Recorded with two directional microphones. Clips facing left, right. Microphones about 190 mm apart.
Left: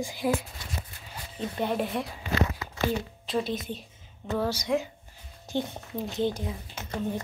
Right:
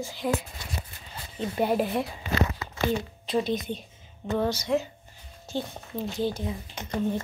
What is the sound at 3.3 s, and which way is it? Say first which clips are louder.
A woman's voice: right 3 dB; centre (ahead or behind).